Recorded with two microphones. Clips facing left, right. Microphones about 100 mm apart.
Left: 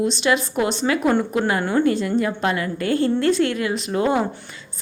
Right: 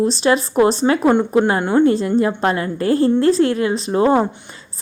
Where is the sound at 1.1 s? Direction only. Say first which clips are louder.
Right 5 dB; 25° right (ahead or behind).